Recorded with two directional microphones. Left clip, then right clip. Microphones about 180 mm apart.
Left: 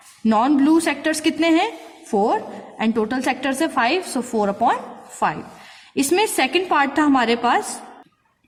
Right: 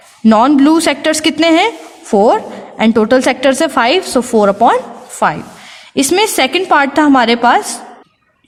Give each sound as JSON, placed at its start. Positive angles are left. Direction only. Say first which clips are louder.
{"t": 0.3, "sound": "a woman's voice", "louder": "right 8 dB", "side_deg": -35}
{"t": 5.9, "sound": "a woman's voice", "louder": "right 7 dB", "side_deg": -35}